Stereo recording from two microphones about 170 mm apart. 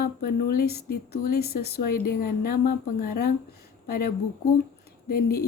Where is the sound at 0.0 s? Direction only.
65° left (ahead or behind).